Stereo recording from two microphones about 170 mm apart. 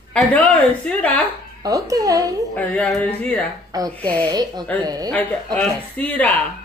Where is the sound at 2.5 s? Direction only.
5° left (ahead or behind).